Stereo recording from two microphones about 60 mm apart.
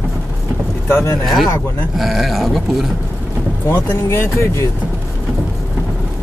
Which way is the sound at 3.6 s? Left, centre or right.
Left.